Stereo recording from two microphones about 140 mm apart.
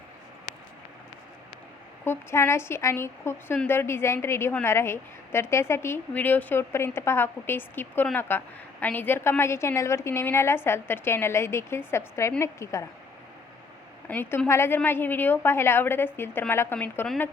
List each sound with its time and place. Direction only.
2.0 s a woman's voice: 20° left (ahead or behind)
14.1 s a woman's voice: 15° left (ahead or behind)